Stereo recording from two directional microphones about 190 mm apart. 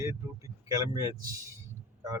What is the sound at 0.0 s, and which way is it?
Speech, 15° right (ahead or behind).